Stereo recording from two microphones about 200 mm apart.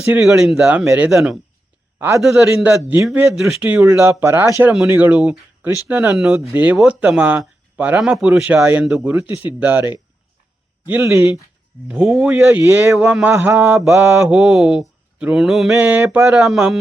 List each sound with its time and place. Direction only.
0.1 s mantra: centre (ahead or behind)
2.0 s a man's voice: 10° right (ahead or behind)
2.2 s mantra: centre (ahead or behind)
3.4 s speech: 10° right (ahead or behind)
10.8 s speech: 10° right (ahead or behind)
13.6 s mantra: centre (ahead or behind)